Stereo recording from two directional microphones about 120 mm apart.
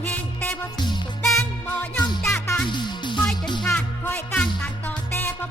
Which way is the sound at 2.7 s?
40° left (ahead or behind).